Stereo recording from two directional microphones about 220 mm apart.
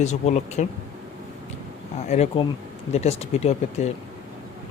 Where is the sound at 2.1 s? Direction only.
30° left (ahead or behind).